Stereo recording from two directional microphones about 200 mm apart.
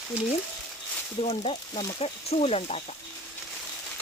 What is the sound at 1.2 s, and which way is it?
Speech, 25° left (ahead or behind).